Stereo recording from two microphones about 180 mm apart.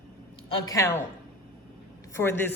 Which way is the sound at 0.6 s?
15° left (ahead or behind).